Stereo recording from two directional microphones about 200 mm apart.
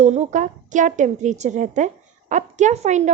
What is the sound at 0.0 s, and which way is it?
A woman's voice, 35° right (ahead or behind).